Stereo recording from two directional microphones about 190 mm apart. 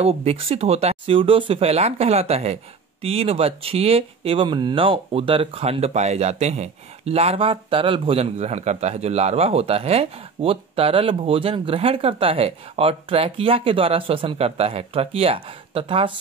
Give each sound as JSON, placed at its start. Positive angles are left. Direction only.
{"t": 0.0, "sound": "speech", "side_deg": -35}